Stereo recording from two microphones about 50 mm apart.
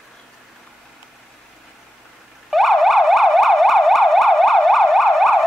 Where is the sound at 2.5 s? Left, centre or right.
Centre.